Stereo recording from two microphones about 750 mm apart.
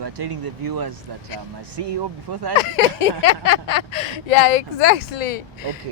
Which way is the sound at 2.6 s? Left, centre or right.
Left.